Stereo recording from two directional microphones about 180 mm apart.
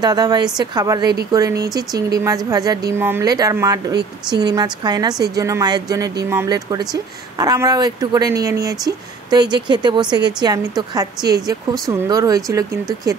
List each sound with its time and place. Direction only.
0.0 s speech: 20° right (ahead or behind)